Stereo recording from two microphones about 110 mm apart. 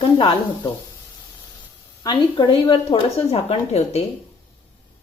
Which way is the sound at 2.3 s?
55° left (ahead or behind).